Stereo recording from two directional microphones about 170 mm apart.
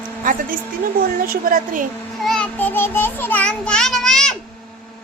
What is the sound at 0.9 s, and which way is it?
Speech, 55° right (ahead or behind).